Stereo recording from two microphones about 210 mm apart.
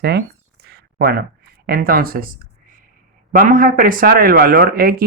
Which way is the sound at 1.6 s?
45° right (ahead or behind).